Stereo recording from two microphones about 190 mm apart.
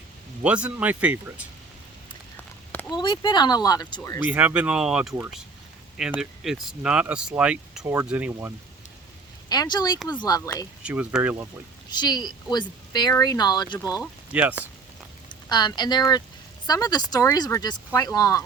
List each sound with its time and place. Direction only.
0.4 s speech: 5° right (ahead or behind)
2.9 s speech: 25° left (ahead or behind)
4.3 s speech: 5° right (ahead or behind)
9.5 s speech: 20° left (ahead or behind)
10.8 s speech: 5° right (ahead or behind)
11.9 s speech: 20° left (ahead or behind)
14.0 s speech: 5° right (ahead or behind)
15.3 s speech: 20° left (ahead or behind)